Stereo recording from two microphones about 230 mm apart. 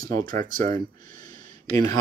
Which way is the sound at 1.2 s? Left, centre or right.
Centre.